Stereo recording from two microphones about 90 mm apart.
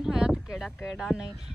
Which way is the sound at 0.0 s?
5° right (ahead or behind).